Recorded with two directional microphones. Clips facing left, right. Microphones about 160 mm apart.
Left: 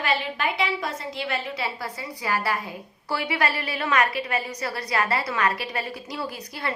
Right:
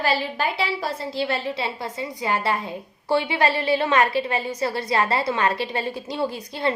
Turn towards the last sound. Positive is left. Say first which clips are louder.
# right 7 dB
turn(degrees=-25)  # may be behind; listen again after turning